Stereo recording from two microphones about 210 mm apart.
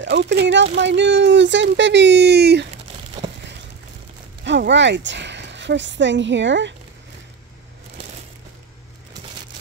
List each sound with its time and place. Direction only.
0.0 s a woman's voice: 55° right (ahead or behind)
4.5 s a woman's voice: 55° right (ahead or behind)